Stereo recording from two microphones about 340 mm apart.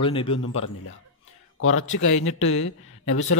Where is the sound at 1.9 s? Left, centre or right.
Left.